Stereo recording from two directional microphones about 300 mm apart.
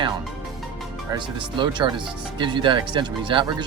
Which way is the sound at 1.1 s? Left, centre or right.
Centre.